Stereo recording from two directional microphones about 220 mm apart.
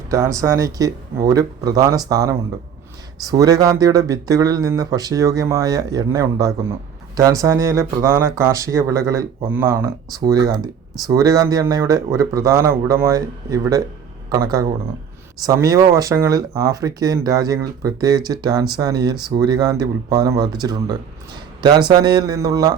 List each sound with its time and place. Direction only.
0.1 s speech: 15° right (ahead or behind)